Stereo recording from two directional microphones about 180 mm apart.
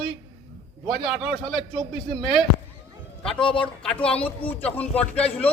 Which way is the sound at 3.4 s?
30° left (ahead or behind).